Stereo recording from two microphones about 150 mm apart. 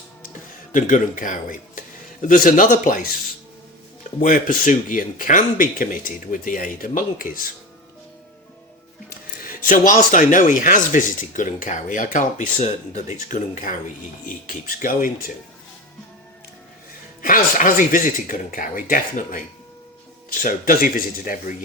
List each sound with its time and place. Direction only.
0.7 s speech: 60° left (ahead or behind)
4.2 s speech: 60° left (ahead or behind)
9.0 s speech: 65° left (ahead or behind)
17.2 s speech: 65° left (ahead or behind)
20.4 s speech: 70° left (ahead or behind)